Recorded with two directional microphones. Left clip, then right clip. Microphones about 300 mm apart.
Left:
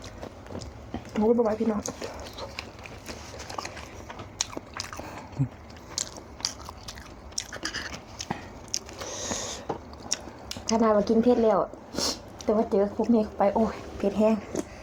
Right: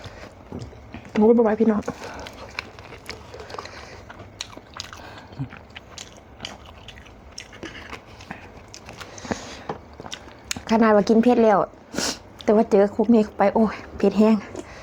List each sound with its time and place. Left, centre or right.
1.1 s speech: right
4.4 s biting: centre
8.2 s a sound: left
9.3 s a sound: right
10.1 s chewing: left
10.5 s speech: right